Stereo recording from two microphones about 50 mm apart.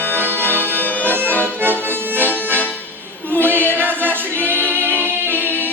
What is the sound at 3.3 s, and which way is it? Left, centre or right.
Choir, right.